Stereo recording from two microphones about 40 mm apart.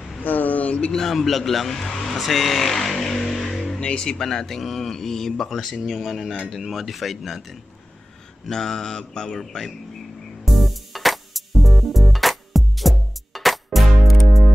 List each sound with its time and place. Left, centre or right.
0.2 s a sound: left
0.9 s speech: centre
3.8 s speech: left; by 7.5 s centre
8.5 s speech: centre
10.4 s music: centre